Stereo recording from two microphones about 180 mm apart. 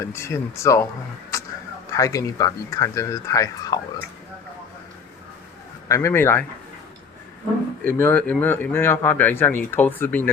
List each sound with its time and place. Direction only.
0.0 s speech: 15° left (ahead or behind)
1.9 s speech: 20° left (ahead or behind)
5.9 s speech: 15° left (ahead or behind)
7.9 s speech: 10° left (ahead or behind)